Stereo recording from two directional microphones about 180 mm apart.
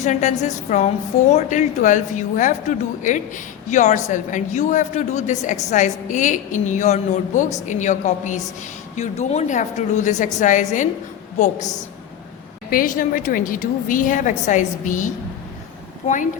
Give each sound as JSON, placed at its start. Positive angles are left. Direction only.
{"t": 0.0, "sound": "a woman's voice", "side_deg": 40}
{"t": 12.7, "sound": "a woman's voice", "side_deg": 50}